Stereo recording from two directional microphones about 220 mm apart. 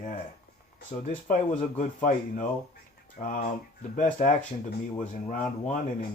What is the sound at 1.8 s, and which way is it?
Speech, 35° left (ahead or behind).